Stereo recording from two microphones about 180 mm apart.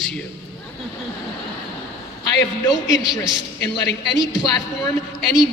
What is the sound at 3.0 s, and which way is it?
Speech, 20° left (ahead or behind).